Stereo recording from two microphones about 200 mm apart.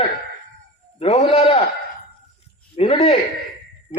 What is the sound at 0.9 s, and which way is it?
Speech, 30° left (ahead or behind).